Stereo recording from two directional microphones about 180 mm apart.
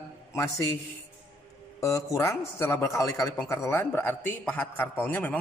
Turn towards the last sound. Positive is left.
turn(degrees=10)  # may be behind; listen again after turning